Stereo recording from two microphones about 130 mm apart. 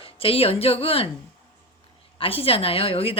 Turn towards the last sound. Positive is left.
turn(degrees=45)  # may be behind; listen again after turning